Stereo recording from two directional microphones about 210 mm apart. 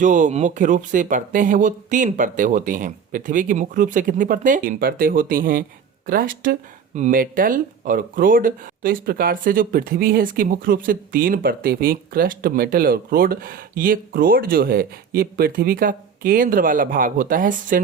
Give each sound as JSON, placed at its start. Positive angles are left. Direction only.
{"t": 0.0, "sound": "speech", "side_deg": -35}